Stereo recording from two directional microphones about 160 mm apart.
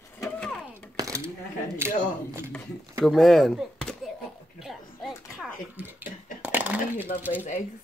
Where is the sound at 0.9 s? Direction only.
20° right (ahead or behind).